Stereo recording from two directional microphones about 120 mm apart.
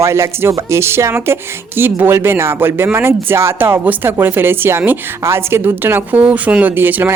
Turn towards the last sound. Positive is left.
turn(degrees=-15)  # may be behind; listen again after turning